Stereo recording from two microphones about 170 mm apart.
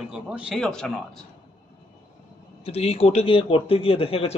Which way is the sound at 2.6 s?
35° left (ahead or behind).